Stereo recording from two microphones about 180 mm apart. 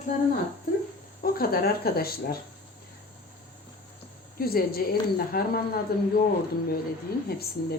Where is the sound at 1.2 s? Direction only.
55° left (ahead or behind).